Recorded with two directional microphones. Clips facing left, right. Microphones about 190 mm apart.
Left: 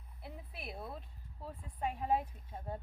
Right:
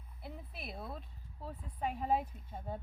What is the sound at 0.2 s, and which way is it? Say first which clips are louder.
A woman's voice: right 1 dB; centre (ahead or behind).